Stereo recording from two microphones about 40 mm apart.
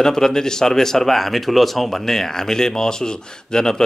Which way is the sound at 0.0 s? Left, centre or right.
Centre.